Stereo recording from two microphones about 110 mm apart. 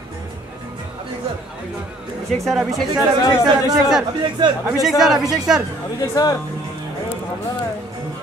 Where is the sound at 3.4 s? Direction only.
40° right (ahead or behind).